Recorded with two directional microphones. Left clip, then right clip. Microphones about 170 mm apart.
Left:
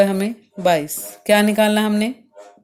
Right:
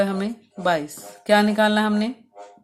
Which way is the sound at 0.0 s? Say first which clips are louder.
Left 6 dB; 30° left (ahead or behind).